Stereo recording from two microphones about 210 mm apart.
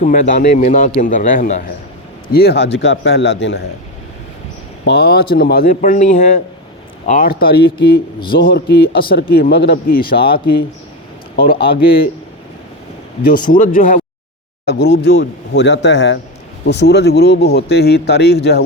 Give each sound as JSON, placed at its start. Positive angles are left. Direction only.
{"t": 0.0, "sound": "a man's voice", "side_deg": 40}
{"t": 2.3, "sound": "a man's voice", "side_deg": 50}
{"t": 4.9, "sound": "speech", "side_deg": 50}
{"t": 13.2, "sound": "a man's voice", "side_deg": 40}
{"t": 14.7, "sound": "a man's voice", "side_deg": 50}